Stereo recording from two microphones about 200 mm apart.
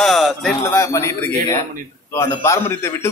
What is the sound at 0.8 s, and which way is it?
Speech, 15° left (ahead or behind).